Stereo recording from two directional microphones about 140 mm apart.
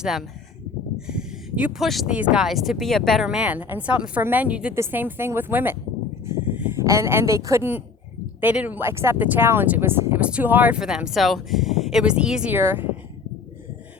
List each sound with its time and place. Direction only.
0.0 s speech: 5° right (ahead or behind)
6.2 s a sound: 15° right (ahead or behind)
8.4 s speech: 10° right (ahead or behind)